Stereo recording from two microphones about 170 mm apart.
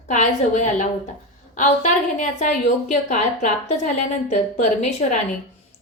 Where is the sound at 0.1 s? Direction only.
45° left (ahead or behind).